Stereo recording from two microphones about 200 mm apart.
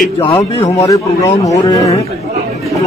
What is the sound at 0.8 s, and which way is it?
A man's voice, 15° left (ahead or behind).